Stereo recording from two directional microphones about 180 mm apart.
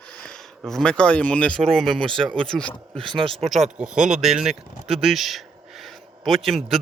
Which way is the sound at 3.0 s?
25° right (ahead or behind).